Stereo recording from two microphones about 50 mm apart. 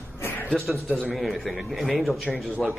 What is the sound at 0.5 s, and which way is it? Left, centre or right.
Speech, centre.